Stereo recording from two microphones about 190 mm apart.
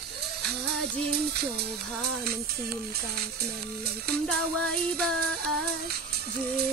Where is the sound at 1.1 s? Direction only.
55° right (ahead or behind).